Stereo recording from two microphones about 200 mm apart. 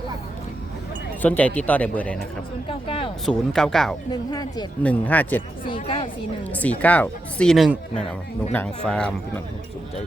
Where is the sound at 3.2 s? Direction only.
5° left (ahead or behind).